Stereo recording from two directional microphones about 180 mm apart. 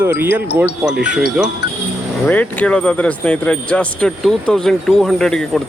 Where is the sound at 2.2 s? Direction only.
10° left (ahead or behind).